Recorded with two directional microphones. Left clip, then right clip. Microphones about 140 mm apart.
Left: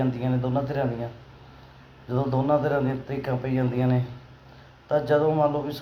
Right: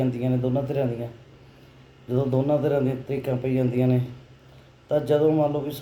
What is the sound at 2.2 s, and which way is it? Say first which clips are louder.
Speech: right 2 dB; 20° left (ahead or behind).